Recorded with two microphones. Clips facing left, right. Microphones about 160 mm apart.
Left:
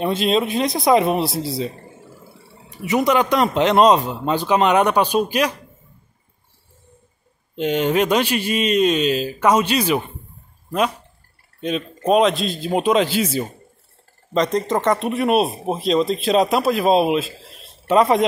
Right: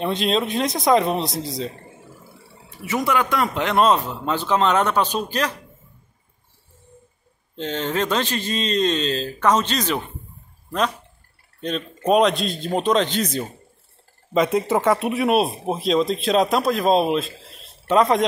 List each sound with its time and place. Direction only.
0.0 s speech: 5° left (ahead or behind)
2.8 s a man's voice: 15° left (ahead or behind)
7.5 s a man's voice: 15° left (ahead or behind)
11.6 s speech: centre (ahead or behind)
14.3 s speech: 5° right (ahead or behind)